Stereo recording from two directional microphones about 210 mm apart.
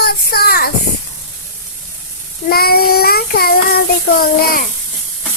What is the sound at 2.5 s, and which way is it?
Child singing, 45° left (ahead or behind).